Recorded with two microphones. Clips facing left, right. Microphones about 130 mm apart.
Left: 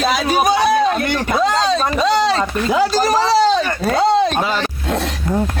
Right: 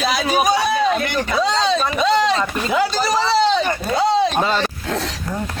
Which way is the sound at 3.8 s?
60° left (ahead or behind).